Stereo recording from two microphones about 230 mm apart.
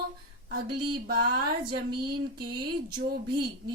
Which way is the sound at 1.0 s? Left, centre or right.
Right.